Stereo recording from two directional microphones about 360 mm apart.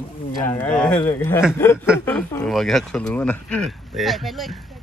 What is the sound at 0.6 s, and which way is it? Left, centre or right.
Speech, centre.